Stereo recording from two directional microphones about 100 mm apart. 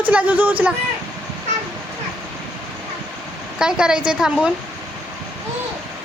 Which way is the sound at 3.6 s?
5° right (ahead or behind).